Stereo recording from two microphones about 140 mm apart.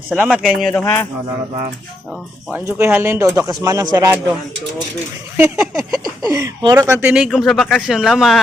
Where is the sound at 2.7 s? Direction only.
15° right (ahead or behind).